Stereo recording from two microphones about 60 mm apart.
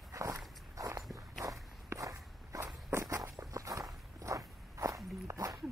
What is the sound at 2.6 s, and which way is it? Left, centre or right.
Walk, right.